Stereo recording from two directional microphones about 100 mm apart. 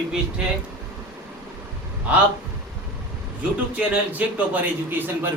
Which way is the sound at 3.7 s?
15° right (ahead or behind).